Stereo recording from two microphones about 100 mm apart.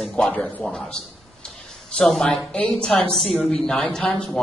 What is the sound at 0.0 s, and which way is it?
Speech, 5° left (ahead or behind).